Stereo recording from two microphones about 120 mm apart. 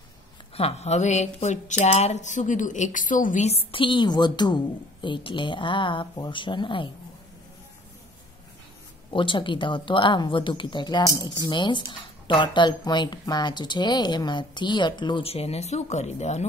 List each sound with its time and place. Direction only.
0.6 s a woman's voice: 60° left (ahead or behind); by 6.9 s 45° left (ahead or behind)
9.1 s speech: 45° left (ahead or behind)
15.2 s speech: 55° left (ahead or behind)